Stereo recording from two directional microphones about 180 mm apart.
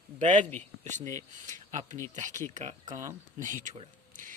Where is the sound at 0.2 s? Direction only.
45° right (ahead or behind).